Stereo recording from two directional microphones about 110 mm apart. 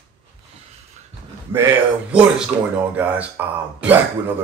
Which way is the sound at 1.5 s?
20° right (ahead or behind).